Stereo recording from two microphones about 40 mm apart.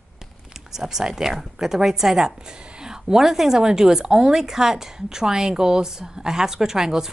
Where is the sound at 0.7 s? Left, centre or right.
Centre.